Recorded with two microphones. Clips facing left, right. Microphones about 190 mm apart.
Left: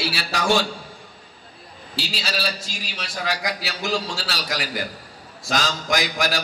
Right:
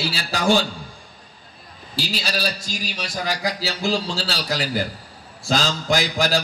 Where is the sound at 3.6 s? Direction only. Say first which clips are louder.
Right 3 dB; 30° right (ahead or behind).